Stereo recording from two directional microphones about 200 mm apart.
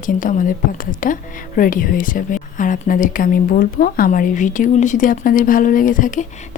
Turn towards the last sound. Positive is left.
turn(degrees=40)  # may be behind; listen again after turning